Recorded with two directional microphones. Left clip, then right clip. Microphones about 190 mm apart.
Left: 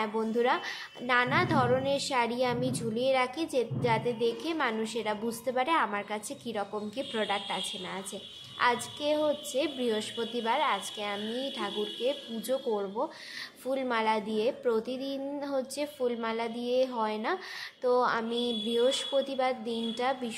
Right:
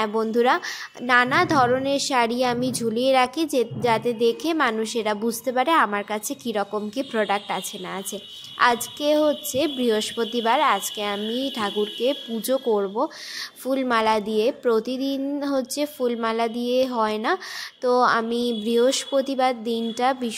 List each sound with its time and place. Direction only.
0.0 s a woman's voice: 40° right (ahead or behind)